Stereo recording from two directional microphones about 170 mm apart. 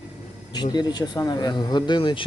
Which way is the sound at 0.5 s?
25° left (ahead or behind).